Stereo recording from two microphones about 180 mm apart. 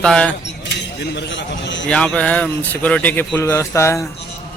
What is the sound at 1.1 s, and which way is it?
Speech, 80° left.